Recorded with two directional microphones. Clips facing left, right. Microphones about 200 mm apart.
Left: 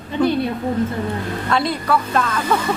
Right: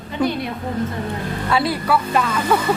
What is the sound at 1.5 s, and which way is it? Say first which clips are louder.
Speech: even; 5° right (ahead or behind).